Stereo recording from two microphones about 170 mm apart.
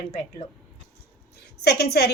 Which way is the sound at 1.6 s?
70° left (ahead or behind).